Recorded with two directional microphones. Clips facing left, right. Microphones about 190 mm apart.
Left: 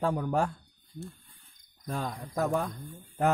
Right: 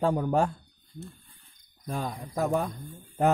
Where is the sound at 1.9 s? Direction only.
10° right (ahead or behind).